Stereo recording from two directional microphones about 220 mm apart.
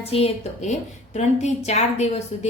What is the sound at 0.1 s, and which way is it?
A woman's voice, 30° left (ahead or behind).